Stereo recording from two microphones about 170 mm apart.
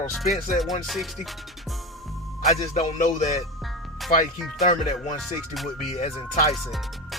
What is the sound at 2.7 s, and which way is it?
Speech, 45° left (ahead or behind).